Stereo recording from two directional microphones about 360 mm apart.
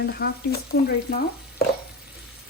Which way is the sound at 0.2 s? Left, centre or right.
Left.